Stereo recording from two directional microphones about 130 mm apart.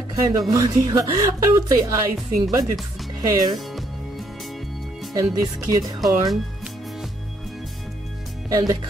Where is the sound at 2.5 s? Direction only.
30° right (ahead or behind).